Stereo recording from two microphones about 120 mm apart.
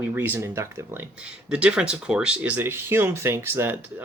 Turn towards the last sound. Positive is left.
turn(degrees=-20)  # may be behind; listen again after turning